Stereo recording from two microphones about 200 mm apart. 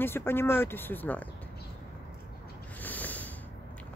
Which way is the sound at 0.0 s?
10° left (ahead or behind).